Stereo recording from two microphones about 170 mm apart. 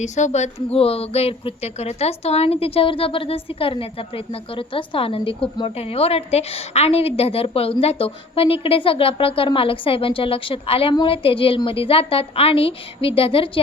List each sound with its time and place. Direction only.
0.0 s speech: 40° left (ahead or behind)